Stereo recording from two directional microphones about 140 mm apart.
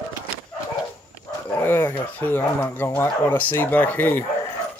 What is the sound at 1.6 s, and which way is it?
Speech, 15° left (ahead or behind).